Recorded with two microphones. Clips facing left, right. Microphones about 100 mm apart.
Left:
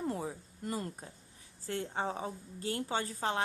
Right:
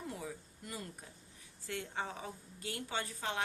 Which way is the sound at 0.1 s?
40° left (ahead or behind).